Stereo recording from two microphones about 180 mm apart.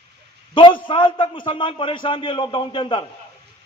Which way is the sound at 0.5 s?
25° left (ahead or behind).